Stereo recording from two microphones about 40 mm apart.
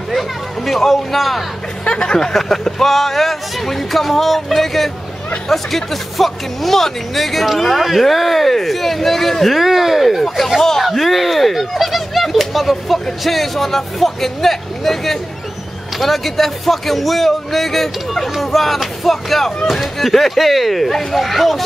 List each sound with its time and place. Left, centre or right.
0.7 s speech: centre
1.9 s speech: left
2.1 s speech: centre